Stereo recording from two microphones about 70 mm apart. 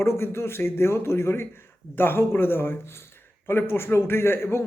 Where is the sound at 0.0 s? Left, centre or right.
Left.